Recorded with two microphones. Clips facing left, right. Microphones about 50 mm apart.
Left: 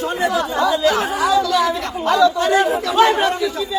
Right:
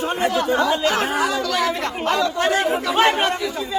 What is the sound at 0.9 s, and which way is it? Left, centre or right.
Chatter, right.